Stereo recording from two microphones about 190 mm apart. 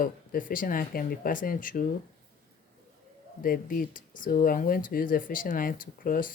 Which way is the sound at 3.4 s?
50° left (ahead or behind).